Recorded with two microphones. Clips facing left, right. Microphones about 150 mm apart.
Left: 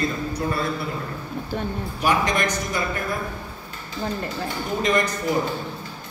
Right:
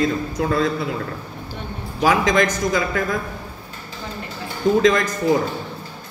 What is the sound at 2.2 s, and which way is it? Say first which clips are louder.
Speech: right 6 dB; 90° right.